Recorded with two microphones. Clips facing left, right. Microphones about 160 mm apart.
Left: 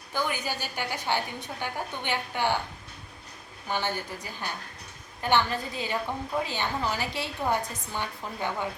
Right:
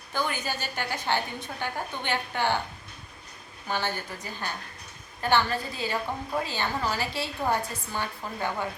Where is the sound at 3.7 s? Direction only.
15° left (ahead or behind).